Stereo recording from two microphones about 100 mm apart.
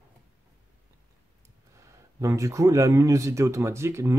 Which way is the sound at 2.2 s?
30° right (ahead or behind).